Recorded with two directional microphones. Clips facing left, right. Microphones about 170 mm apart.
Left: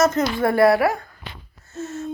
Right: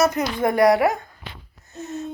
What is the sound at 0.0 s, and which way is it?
A woman's voice, 15° right (ahead or behind).